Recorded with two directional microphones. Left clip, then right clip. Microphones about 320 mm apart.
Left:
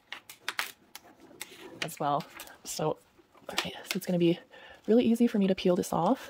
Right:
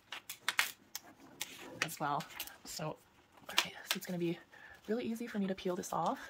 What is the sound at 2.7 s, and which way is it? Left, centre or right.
Speech, left.